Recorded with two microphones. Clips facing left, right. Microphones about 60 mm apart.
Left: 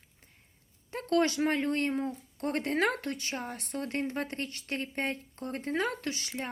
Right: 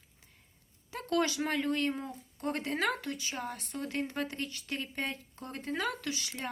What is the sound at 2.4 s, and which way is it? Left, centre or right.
Speech, left.